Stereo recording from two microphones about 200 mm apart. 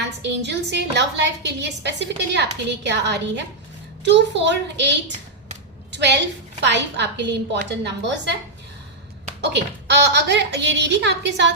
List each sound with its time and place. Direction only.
0.2 s a woman's voice: 55° right (ahead or behind)
9.4 s a woman's voice: 60° right (ahead or behind)